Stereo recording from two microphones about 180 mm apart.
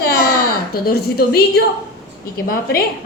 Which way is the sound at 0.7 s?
55° left (ahead or behind).